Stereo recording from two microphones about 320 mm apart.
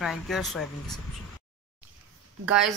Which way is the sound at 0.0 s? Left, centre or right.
Centre.